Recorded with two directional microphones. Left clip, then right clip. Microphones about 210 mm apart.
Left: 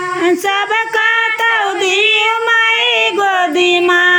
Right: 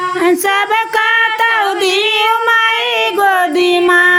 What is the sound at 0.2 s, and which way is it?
Child singing, 10° right (ahead or behind).